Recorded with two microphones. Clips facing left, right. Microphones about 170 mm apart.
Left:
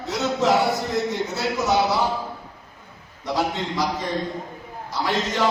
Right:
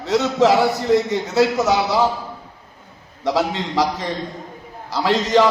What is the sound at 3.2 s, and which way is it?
Speech, 75° right (ahead or behind).